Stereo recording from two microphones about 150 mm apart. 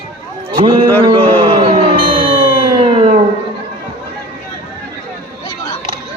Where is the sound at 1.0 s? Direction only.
35° right (ahead or behind).